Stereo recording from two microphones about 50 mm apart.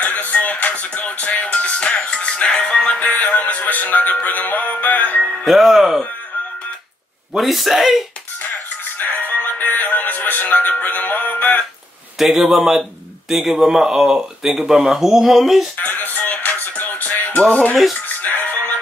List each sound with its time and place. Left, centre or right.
0.0 s music: left
5.2 s speech: centre
7.3 s speech: centre
8.5 s music: left
12.2 s speech: centre
15.8 s music: left
18.0 s music: left